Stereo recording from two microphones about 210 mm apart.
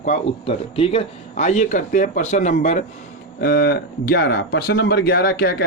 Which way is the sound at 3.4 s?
45° left (ahead or behind).